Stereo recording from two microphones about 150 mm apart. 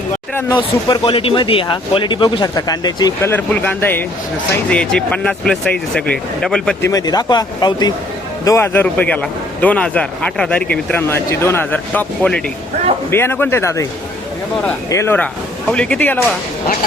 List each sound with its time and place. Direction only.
0.5 s a man's voice: 35° left (ahead or behind); by 6.7 s 5° left (ahead or behind)
6.8 s speech: 25° left (ahead or behind)
8.4 s a man's voice: 15° left (ahead or behind)
14.8 s a man's voice: 20° left (ahead or behind)